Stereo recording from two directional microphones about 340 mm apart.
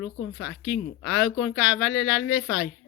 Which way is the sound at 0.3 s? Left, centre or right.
Centre.